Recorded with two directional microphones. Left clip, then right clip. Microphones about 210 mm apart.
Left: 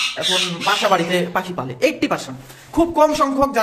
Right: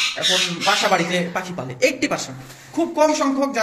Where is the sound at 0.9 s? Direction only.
15° left (ahead or behind).